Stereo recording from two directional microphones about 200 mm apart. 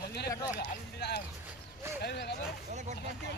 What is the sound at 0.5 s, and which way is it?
Speech, 55° left (ahead or behind).